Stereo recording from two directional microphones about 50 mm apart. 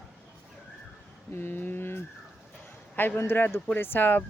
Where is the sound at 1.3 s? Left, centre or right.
Left.